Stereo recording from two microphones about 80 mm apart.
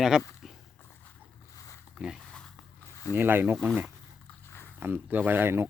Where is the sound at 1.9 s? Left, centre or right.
Centre.